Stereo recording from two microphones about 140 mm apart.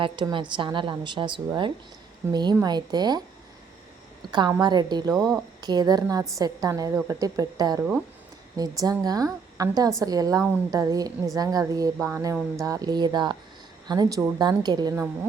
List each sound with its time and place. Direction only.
0.0 s a woman's voice: 35° right (ahead or behind)
11.9 s a woman's voice: 15° right (ahead or behind); by 14.9 s 30° right (ahead or behind)
14.9 s a woman's voice: 15° right (ahead or behind)